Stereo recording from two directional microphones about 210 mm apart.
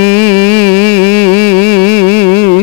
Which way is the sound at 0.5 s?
60° left (ahead or behind).